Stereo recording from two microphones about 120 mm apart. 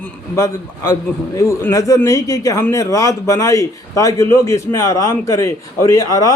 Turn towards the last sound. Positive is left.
turn(degrees=30)  # may be behind; listen again after turning